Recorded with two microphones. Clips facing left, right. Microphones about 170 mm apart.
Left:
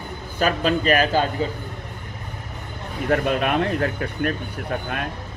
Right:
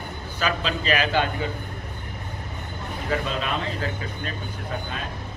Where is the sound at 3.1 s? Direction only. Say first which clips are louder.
Left 6 dB; 60° left (ahead or behind).